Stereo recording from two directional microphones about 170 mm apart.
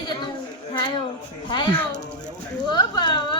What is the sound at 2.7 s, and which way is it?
Speech, 25° left (ahead or behind).